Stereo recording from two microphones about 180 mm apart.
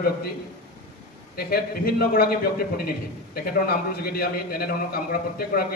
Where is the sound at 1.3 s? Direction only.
55° left (ahead or behind).